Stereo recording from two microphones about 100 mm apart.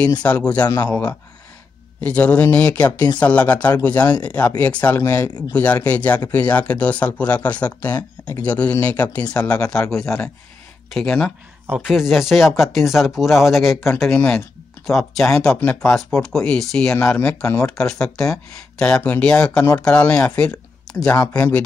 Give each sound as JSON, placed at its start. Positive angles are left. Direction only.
{"t": 0.2, "sound": "speech", "side_deg": 10}
{"t": 5.0, "sound": "speech", "side_deg": 25}
{"t": 5.5, "sound": "speech", "side_deg": 15}
{"t": 14.1, "sound": "speech", "side_deg": 10}
{"t": 20.9, "sound": "a sound", "side_deg": 5}
{"t": 21.4, "sound": "speech", "side_deg": 15}